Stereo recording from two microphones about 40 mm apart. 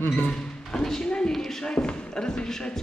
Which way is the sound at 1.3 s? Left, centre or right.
Centre.